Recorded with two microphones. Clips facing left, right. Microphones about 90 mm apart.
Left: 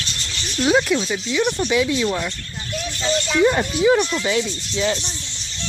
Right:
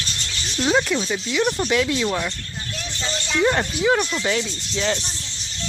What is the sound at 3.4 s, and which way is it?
Speech, 10° right (ahead or behind).